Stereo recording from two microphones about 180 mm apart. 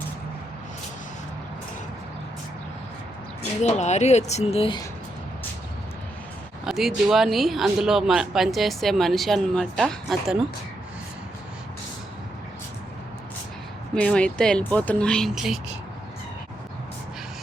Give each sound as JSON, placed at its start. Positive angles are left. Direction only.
{"t": 3.6, "sound": "speech", "side_deg": 40}
{"t": 6.7, "sound": "speech", "side_deg": 0}
{"t": 13.9, "sound": "speech", "side_deg": 5}